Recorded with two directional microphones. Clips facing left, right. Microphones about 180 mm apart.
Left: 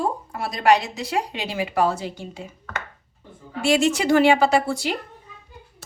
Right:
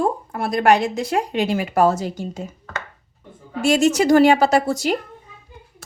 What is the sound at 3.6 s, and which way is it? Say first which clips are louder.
A woman's voice: right 3 dB; 45° right (ahead or behind).